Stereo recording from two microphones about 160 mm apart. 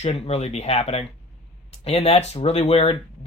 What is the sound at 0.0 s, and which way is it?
Speech, 40° left (ahead or behind).